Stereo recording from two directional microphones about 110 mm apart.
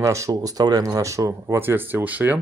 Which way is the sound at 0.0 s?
30° right (ahead or behind).